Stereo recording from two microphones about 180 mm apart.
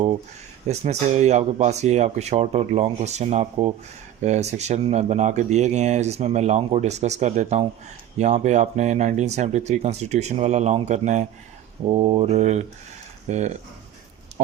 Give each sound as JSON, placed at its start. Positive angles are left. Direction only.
{"t": 0.7, "sound": "speech", "side_deg": -40}